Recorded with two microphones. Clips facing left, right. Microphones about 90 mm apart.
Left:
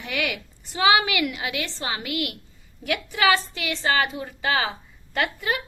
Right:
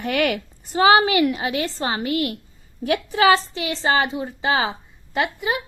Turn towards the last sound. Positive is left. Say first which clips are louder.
# right 3 dB
turn(degrees=-20)  # may be behind; listen again after turning